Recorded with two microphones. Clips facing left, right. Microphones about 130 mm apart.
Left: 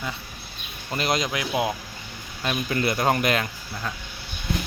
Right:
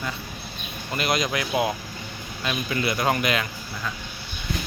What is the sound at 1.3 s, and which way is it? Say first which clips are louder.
Speech: right 1 dB; 15° left (ahead or behind).